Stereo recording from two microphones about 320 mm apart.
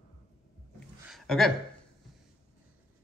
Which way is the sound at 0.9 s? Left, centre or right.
Centre.